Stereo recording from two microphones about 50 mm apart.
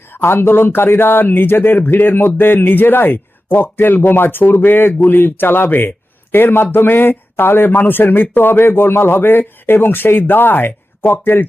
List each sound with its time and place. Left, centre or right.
0.1 s speech: left